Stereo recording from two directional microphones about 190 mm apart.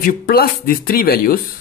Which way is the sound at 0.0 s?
50° left (ahead or behind).